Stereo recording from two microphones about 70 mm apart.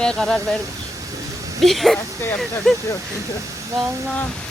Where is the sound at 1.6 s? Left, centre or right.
Centre.